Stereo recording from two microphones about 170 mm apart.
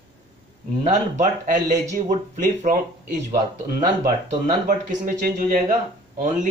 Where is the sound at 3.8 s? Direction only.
50° right (ahead or behind).